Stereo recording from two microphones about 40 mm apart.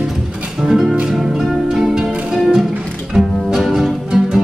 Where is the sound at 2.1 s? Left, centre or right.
Right.